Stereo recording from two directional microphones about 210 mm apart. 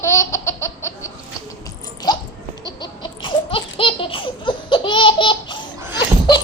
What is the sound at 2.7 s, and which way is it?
Baby laughter, 20° left (ahead or behind).